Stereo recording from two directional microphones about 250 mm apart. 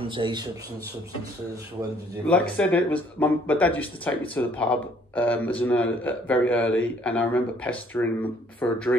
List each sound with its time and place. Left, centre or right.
0.1 s speech: centre
2.2 s speech: centre